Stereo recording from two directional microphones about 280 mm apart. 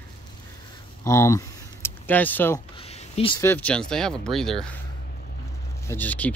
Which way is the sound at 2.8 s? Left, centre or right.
Left.